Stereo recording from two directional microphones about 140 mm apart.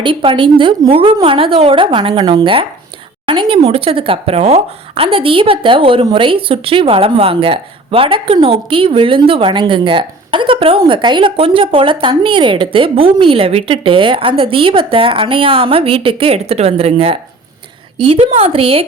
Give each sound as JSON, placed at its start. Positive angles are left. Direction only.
{"t": 0.0, "sound": "speech", "side_deg": -40}